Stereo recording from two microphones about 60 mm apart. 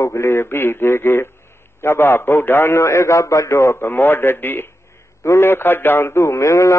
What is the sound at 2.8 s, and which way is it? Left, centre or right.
Speech, left.